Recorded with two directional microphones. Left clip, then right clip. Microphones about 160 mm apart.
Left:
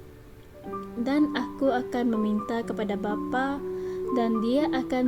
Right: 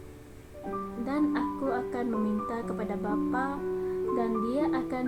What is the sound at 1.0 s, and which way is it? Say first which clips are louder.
A woman's voice: left 3 dB; 65° left (ahead or behind).